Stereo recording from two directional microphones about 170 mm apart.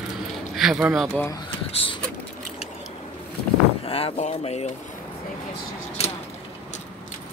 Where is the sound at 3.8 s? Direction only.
35° left (ahead or behind).